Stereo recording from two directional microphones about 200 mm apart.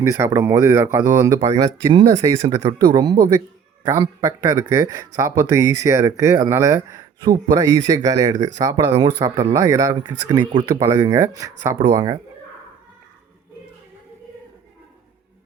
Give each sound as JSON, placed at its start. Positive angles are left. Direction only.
{"t": 0.0, "sound": "speech", "side_deg": -15}